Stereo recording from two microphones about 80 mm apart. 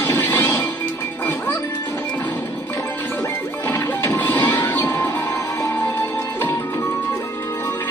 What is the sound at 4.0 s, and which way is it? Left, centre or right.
Music, left.